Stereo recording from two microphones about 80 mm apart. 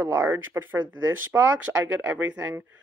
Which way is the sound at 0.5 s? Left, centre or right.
Right.